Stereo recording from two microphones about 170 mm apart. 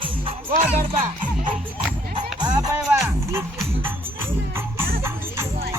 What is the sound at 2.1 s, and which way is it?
Music, 25° right (ahead or behind).